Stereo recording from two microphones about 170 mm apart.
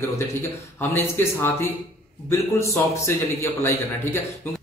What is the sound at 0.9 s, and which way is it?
A man's voice, 15° left (ahead or behind).